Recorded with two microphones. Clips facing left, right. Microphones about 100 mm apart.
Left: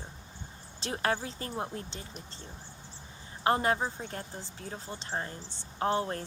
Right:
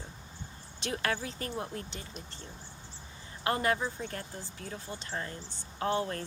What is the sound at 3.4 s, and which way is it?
Speech, 25° left (ahead or behind).